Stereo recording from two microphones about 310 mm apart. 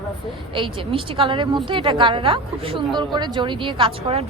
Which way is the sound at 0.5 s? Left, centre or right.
Centre.